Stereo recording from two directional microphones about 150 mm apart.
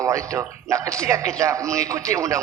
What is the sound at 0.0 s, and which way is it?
A man's voice, 20° right (ahead or behind).